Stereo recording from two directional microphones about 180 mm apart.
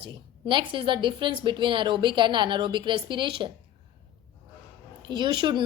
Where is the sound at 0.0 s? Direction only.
25° right (ahead or behind).